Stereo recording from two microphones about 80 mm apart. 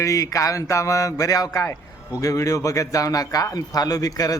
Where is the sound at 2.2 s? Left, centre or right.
Left.